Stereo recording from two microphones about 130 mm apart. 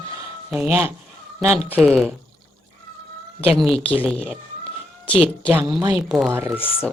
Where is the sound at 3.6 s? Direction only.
5° left (ahead or behind).